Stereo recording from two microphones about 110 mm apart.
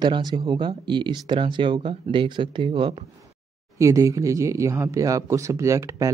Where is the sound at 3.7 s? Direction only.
30° right (ahead or behind).